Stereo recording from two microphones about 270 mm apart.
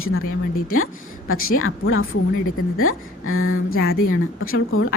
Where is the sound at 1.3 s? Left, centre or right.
Left.